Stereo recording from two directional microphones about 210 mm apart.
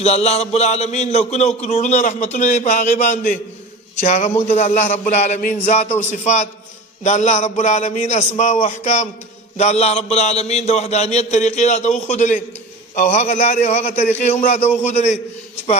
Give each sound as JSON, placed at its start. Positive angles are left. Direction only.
{"t": 0.0, "sound": "a man's voice", "side_deg": 30}
{"t": 4.5, "sound": "a man's voice", "side_deg": 35}